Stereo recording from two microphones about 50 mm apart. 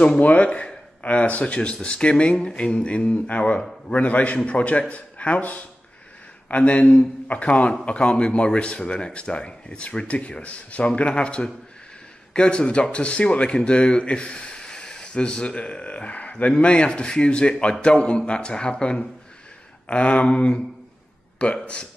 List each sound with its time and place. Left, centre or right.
0.2 s speech: left